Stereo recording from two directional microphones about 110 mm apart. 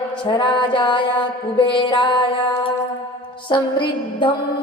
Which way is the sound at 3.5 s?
45° left (ahead or behind).